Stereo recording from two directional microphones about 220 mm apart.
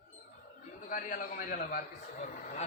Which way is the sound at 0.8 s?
35° left (ahead or behind).